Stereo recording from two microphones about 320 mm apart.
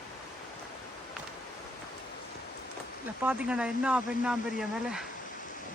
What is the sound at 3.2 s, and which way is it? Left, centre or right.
Speech, centre.